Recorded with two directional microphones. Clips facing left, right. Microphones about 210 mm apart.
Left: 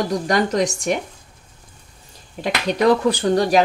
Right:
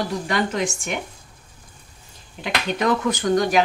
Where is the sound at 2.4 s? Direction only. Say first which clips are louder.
Left 4 dB; 35° left (ahead or behind).